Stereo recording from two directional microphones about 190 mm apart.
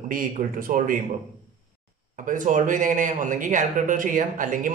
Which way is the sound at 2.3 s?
45° right (ahead or behind).